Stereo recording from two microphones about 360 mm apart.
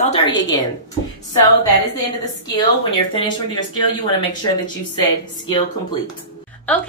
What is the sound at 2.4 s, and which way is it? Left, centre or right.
Speech, centre.